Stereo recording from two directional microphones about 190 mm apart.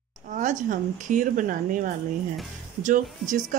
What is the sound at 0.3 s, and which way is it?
Speech, 45° right (ahead or behind).